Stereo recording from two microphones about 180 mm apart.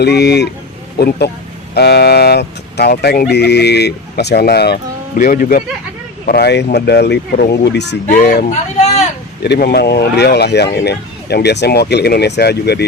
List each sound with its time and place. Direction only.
0.0 s speech: 65° left (ahead or behind)
5.2 s speech: 40° left (ahead or behind)
6.2 s speech: 60° left (ahead or behind)
8.0 s speech: 55° left (ahead or behind)
8.4 s speech: 40° left (ahead or behind)
9.4 s speech: 65° left (ahead or behind)